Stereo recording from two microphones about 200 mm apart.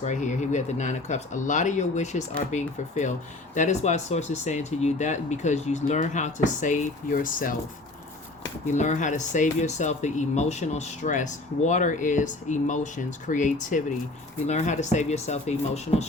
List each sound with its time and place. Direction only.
0.0 s speech: 35° left (ahead or behind)
8.6 s speech: 35° left (ahead or behind)